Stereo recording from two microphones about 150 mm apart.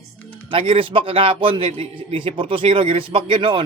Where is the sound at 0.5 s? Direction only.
35° right (ahead or behind).